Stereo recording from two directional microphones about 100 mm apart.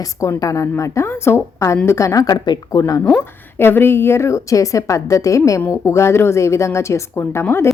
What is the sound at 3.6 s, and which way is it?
A woman's voice, 20° left (ahead or behind).